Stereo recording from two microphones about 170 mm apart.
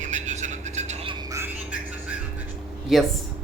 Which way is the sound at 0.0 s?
45° right (ahead or behind).